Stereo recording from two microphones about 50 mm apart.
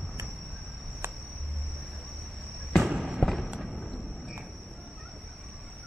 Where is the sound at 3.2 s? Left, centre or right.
Left.